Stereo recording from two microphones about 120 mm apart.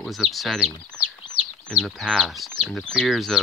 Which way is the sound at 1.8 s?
5° left (ahead or behind).